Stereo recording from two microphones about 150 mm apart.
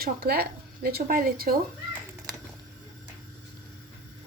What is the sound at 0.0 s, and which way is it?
Speech, 90° right.